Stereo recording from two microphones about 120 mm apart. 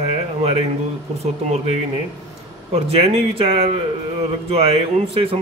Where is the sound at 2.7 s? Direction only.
55° right (ahead or behind).